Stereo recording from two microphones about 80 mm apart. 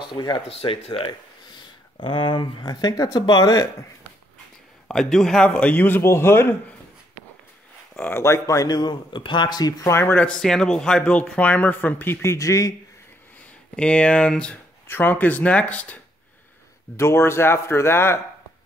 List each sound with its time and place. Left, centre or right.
0.0 s speech: left
1.6 s speech: left
4.8 s a man's voice: centre; by 6.5 s left
8.1 s speech: left
8.6 s speech: left
9.8 s a man's voice: left
10.2 s speech: centre; by 12.7 s left
13.7 s speech: centre
14.9 s a man's voice: left
16.9 s speech: left